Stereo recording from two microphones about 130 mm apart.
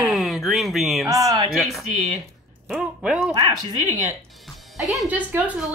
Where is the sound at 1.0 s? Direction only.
25° right (ahead or behind).